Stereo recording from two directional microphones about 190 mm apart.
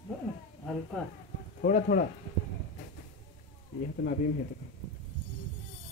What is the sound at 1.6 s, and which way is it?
Speech, 45° left (ahead or behind).